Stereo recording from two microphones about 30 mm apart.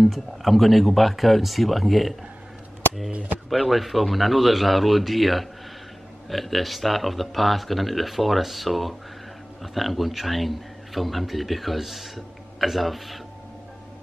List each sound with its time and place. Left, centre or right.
0.0 s speech: centre
3.4 s speech: centre